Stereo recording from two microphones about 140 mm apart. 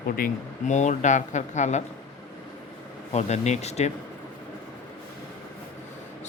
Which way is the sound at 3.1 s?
55° left (ahead or behind).